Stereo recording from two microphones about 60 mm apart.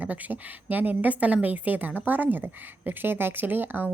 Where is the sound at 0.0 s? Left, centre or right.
Right.